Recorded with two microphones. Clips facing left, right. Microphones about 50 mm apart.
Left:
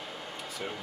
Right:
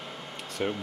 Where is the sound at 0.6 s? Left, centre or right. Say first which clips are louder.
Right 9 dB; right.